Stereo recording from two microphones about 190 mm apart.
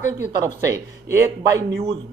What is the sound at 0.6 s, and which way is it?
Speech, 15° right (ahead or behind).